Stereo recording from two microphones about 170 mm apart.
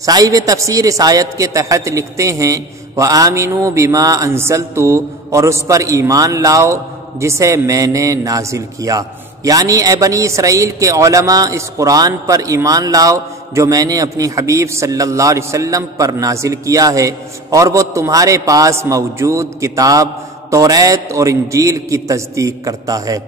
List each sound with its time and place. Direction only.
0.0 s a man's voice: 20° right (ahead or behind)